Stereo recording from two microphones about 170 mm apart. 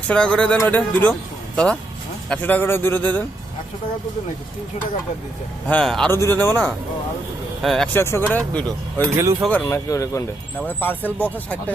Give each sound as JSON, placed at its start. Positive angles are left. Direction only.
{"t": 0.1, "sound": "a man's voice", "side_deg": 5}
{"t": 5.6, "sound": "a man's voice", "side_deg": 5}
{"t": 6.1, "sound": "a man's voice", "side_deg": 15}
{"t": 7.9, "sound": "speech", "side_deg": 15}